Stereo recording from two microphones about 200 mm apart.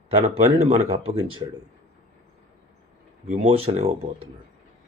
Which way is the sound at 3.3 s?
30° right (ahead or behind).